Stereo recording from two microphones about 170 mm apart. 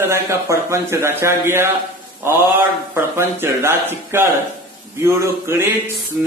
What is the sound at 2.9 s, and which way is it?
Speech, 15° right (ahead or behind).